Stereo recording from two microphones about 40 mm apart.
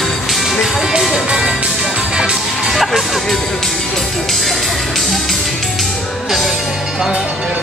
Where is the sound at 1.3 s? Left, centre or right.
Centre.